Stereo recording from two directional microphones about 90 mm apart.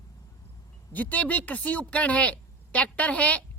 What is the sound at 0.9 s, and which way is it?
A woman's voice, 15° left (ahead or behind).